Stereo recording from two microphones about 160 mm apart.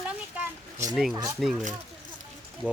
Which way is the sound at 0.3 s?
20° right (ahead or behind).